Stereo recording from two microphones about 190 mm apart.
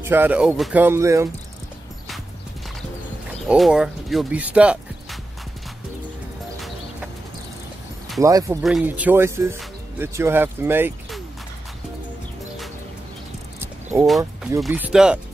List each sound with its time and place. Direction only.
0.0 s speech: 10° right (ahead or behind)
3.4 s speech: centre (ahead or behind)
8.2 s speech: 15° right (ahead or behind)
8.6 s speech: 5° right (ahead or behind)
13.6 s a sound: 10° right (ahead or behind)
14.0 s speech: centre (ahead or behind)